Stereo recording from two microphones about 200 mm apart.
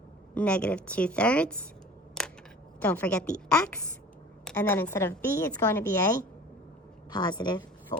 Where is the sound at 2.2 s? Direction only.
5° left (ahead or behind).